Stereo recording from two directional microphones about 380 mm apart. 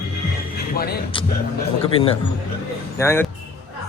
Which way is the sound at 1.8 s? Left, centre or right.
Centre.